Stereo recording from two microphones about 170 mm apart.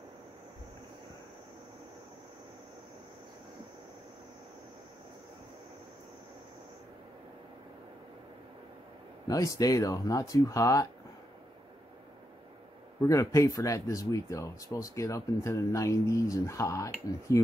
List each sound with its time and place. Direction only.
9.3 s speech: 20° left (ahead or behind)
13.0 s speech: 20° left (ahead or behind)